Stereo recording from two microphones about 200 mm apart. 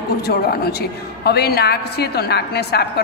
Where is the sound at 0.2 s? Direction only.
50° left (ahead or behind).